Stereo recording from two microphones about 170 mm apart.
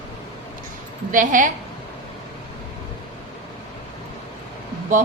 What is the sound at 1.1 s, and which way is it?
Speech, 50° right (ahead or behind).